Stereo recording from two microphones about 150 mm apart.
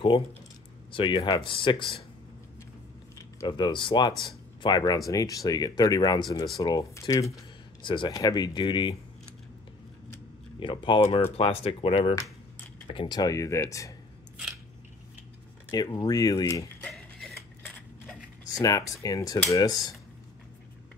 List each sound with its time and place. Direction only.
0.9 s speech: 30° left (ahead or behind)
3.3 s speech: 30° left (ahead or behind)
7.8 s speech: 30° left (ahead or behind)
10.6 s speech: 35° left (ahead or behind)
15.7 s speech: 25° left (ahead or behind)
16.8 s a sound: centre (ahead or behind)
18.5 s speech: 25° left (ahead or behind)